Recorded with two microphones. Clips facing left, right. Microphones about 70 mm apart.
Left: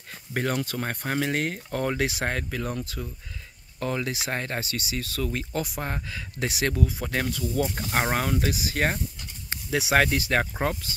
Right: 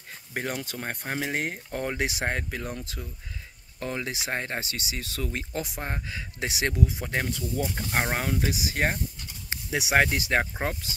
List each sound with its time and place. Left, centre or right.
0.3 s speech: centre
7.6 s speech: centre